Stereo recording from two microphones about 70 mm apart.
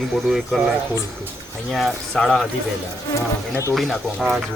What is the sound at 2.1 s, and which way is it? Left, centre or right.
Speech, centre.